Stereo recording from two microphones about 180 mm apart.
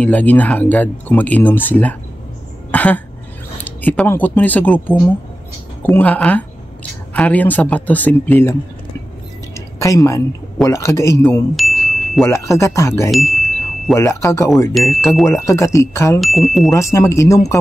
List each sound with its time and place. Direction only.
0.0 s speech: 10° left (ahead or behind)
2.7 s cough: 10° left (ahead or behind)
3.6 s speech: 10° left (ahead or behind)
11.5 s chime: centre (ahead or behind)
12.3 s speech: 15° left (ahead or behind)
13.4 s chime: centre (ahead or behind)
13.9 s speech: 15° left (ahead or behind)
14.7 s speech: centre (ahead or behind)
15.2 s speech: 15° left (ahead or behind)
16.2 s speech: centre (ahead or behind)
16.7 s speech: 15° left (ahead or behind)